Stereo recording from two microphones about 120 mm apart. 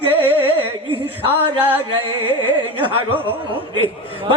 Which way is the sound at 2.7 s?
45° right (ahead or behind).